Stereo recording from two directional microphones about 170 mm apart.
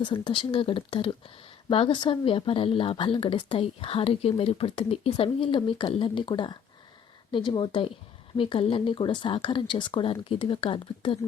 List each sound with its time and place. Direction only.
0.0 s speech: 30° left (ahead or behind)